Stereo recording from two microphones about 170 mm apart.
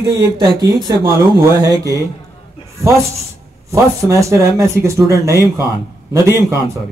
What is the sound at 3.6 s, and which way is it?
A man's voice, 15° right (ahead or behind).